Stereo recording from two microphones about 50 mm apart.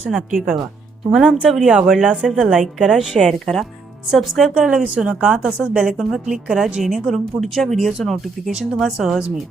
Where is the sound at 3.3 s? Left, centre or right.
Centre.